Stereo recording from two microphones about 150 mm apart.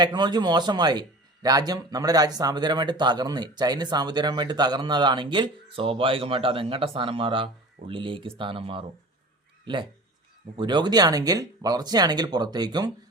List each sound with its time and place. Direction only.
0.0 s speech: 30° right (ahead or behind)
10.6 s speech: 30° right (ahead or behind)